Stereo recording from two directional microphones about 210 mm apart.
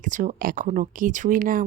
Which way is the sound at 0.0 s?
40° right (ahead or behind).